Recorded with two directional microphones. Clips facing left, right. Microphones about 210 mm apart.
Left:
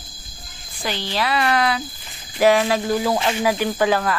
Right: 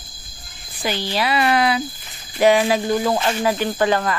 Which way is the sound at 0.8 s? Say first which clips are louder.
Right 2 dB; 5° right (ahead or behind).